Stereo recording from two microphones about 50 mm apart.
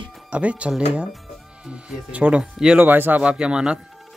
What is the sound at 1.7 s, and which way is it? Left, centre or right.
Speech, right.